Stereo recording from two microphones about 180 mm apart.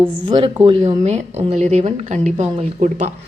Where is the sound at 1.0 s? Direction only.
40° right (ahead or behind).